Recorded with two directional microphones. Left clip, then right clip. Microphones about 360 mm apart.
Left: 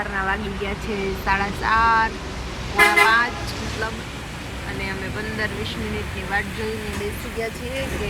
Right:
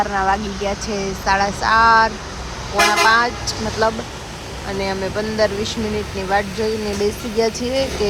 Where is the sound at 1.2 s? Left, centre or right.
Centre.